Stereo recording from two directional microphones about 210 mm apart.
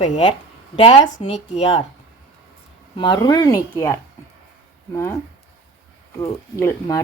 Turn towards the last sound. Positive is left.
turn(degrees=15)  # may be behind; listen again after turning